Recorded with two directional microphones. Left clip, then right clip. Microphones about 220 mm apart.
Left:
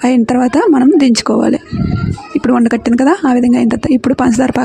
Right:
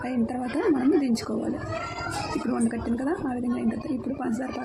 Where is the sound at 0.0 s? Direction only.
45° left (ahead or behind).